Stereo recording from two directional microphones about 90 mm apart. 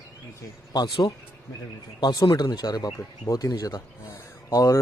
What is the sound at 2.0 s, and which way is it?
Speech, 50° left (ahead or behind).